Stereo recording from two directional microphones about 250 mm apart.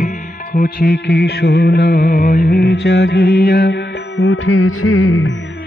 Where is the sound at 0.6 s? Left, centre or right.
Left.